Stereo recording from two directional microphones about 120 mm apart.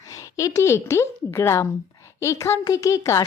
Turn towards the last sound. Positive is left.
turn(degrees=25)  # may be behind; listen again after turning